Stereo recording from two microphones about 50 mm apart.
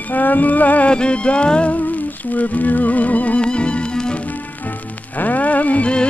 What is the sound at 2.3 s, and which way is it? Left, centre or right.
Music, left.